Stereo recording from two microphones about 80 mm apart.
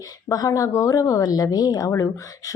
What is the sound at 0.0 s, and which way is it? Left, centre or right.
Speech, left.